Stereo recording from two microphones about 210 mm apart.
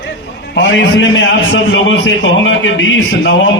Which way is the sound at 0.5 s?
60° left (ahead or behind).